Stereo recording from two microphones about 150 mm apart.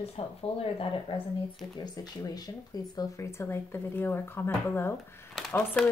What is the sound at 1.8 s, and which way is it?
Speech, 25° left (ahead or behind).